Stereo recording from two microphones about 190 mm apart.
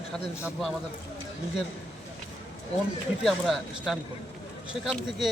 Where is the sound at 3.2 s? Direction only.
Centre (ahead or behind).